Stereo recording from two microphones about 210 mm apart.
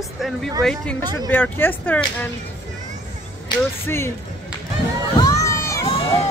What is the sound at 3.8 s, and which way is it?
Speech, 10° left (ahead or behind).